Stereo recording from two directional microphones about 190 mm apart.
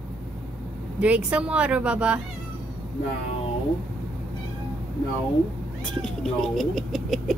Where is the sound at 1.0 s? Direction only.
5° right (ahead or behind).